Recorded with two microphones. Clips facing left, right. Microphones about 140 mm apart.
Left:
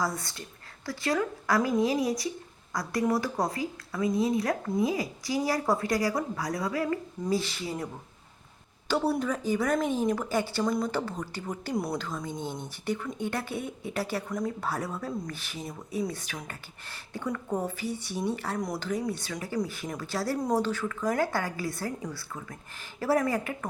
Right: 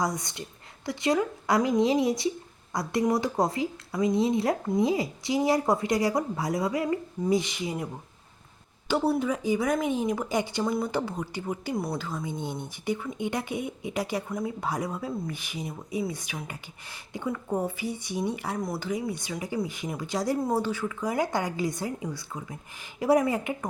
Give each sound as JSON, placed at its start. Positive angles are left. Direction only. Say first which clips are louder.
{"t": 0.0, "sound": "speech", "louder": "right 2 dB", "side_deg": -20}
{"t": 8.9, "sound": "speech", "louder": "right 2 dB", "side_deg": -10}
{"t": 11.7, "sound": "a woman's voice", "louder": "left 2 dB", "side_deg": 0}